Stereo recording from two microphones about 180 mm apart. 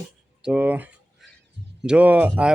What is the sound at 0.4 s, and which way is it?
A man's voice, 5° right (ahead or behind).